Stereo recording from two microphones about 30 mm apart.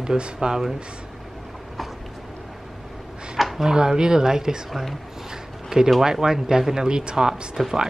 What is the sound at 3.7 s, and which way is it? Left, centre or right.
Speech, right.